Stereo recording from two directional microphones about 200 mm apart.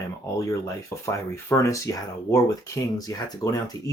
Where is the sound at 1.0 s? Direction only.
15° left (ahead or behind).